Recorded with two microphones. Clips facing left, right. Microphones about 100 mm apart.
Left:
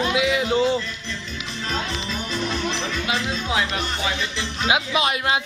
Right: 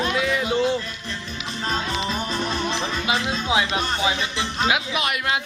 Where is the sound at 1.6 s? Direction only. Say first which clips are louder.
Right 3 dB; 35° right (ahead or behind).